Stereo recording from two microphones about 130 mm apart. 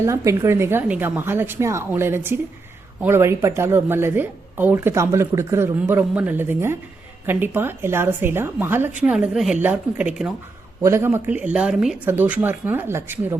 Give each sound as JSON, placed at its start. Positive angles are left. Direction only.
{"t": 0.0, "sound": "a woman's voice", "side_deg": -20}
{"t": 10.8, "sound": "a woman's voice", "side_deg": -20}
{"t": 12.0, "sound": "a woman's voice", "side_deg": -15}